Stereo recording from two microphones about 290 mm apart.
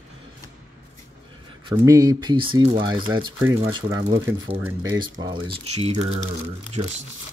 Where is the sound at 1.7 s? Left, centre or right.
Centre.